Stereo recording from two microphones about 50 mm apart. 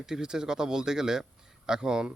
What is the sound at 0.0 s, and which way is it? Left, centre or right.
A man's voice, centre.